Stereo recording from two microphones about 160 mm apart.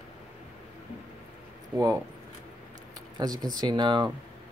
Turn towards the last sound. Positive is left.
turn(degrees=-30)  # may be behind; listen again after turning